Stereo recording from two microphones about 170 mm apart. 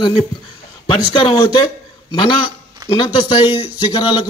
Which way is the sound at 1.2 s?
25° left (ahead or behind).